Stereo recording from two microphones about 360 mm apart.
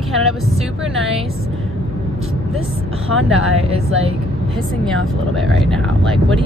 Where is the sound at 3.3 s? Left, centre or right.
Right.